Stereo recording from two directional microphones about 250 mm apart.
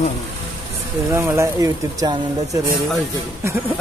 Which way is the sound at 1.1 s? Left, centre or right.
Centre.